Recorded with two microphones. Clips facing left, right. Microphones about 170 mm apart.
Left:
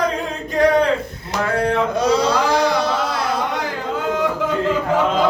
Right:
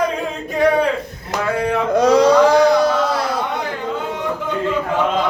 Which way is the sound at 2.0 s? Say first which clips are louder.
Right 7 dB; 45° right (ahead or behind).